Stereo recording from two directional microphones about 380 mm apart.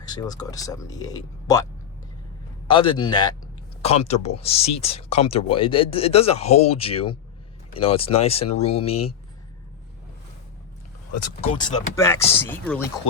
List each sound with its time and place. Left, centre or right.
0.1 s speech: centre
2.6 s speech: centre
11.3 s speech: centre